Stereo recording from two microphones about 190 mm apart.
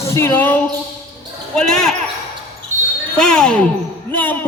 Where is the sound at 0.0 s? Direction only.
15° left (ahead or behind).